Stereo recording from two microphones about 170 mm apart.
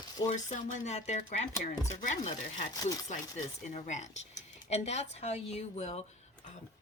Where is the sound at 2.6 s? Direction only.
20° left (ahead or behind).